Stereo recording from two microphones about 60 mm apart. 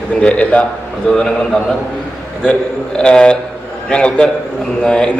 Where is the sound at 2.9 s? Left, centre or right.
Centre.